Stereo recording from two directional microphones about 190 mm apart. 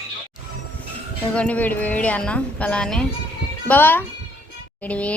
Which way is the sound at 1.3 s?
5° left (ahead or behind).